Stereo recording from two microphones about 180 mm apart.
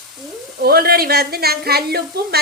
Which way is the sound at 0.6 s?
60° right (ahead or behind).